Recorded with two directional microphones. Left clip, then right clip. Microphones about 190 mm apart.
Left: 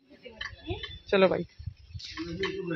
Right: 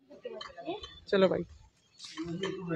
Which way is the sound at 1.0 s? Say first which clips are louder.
Left 3 dB; 10° left (ahead or behind).